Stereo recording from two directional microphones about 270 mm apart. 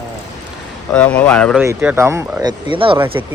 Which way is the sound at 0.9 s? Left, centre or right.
Centre.